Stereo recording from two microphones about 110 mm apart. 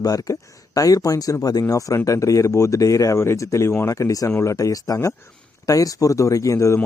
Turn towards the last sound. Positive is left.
turn(degrees=25)  # may be behind; listen again after turning